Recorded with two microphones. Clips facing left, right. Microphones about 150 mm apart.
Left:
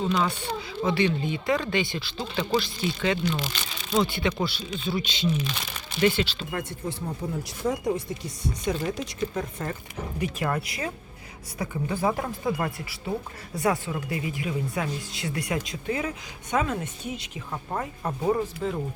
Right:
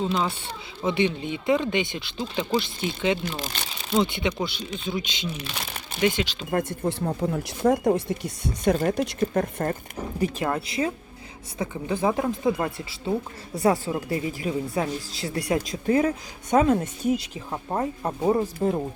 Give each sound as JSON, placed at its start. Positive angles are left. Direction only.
{"t": 0.0, "sound": "speech", "side_deg": -25}
{"t": 3.3, "sound": "speech", "side_deg": -40}
{"t": 3.9, "sound": "speech", "side_deg": -20}
{"t": 6.5, "sound": "speech", "side_deg": -45}
{"t": 6.8, "sound": "speech", "side_deg": -65}
{"t": 10.2, "sound": "speech", "side_deg": -30}
{"t": 17.5, "sound": "speech", "side_deg": -20}